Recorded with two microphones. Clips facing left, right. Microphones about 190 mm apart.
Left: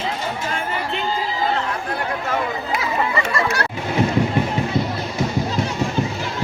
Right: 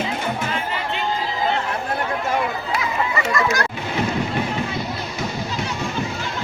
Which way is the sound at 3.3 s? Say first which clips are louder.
Right 1 dB; 30° left (ahead or behind).